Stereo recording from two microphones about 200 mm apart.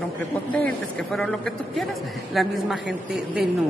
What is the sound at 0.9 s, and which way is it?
A man's voice, 5° left (ahead or behind).